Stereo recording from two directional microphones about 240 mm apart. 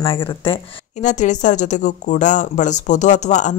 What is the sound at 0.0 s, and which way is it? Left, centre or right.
A woman's voice, left.